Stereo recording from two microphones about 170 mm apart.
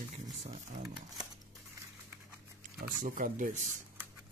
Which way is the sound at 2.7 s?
50° right (ahead or behind).